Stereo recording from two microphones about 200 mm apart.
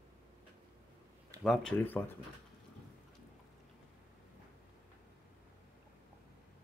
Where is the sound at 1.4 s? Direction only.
5° left (ahead or behind).